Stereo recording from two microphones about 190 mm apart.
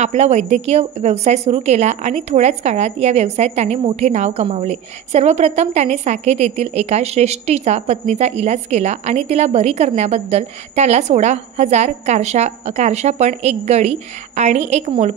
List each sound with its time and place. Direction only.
0.0 s a woman's voice: 35° right (ahead or behind)